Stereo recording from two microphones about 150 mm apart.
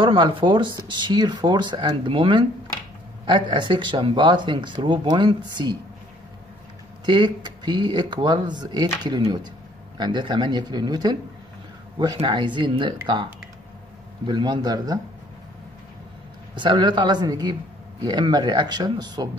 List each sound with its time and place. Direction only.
0.0 s speech: 35° right (ahead or behind)
7.1 s speech: 30° right (ahead or behind)
16.5 s speech: 30° right (ahead or behind)